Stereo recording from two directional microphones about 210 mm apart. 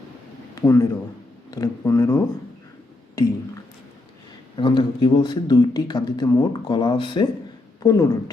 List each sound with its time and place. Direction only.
0.5 s a man's voice: 15° left (ahead or behind)
4.5 s speech: 25° left (ahead or behind)